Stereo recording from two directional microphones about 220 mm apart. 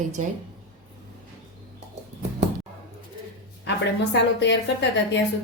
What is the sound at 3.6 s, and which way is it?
A woman's voice, 55° left (ahead or behind).